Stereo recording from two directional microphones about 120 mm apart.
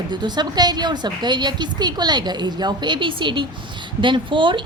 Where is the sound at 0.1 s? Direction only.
40° right (ahead or behind).